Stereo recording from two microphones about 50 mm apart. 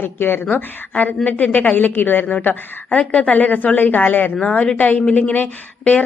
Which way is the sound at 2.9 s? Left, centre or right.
Left.